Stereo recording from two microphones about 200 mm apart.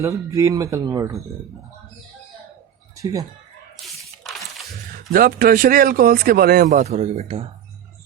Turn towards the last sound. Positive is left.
turn(degrees=-30)  # may be behind; listen again after turning